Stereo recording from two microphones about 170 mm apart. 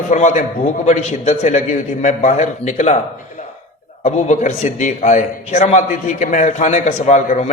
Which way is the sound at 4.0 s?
40° left (ahead or behind).